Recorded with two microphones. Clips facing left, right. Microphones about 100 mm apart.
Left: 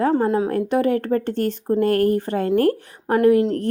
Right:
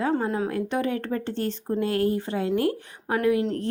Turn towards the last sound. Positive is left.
turn(degrees=40)  # may be behind; listen again after turning